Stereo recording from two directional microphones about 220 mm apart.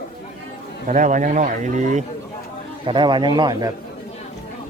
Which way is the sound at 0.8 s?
35° right (ahead or behind).